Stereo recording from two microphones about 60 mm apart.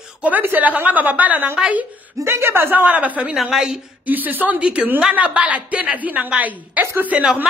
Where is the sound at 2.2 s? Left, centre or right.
Right.